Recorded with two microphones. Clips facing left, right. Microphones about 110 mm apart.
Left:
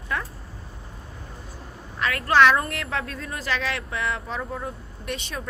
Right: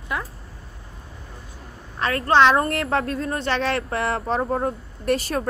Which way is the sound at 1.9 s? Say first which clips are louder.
Right 2 dB; 35° right (ahead or behind).